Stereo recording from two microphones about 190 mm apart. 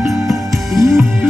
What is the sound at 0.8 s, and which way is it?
Music, 15° right (ahead or behind).